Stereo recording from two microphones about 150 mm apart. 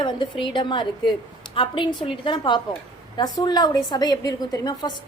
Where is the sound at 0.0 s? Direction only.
30° left (ahead or behind).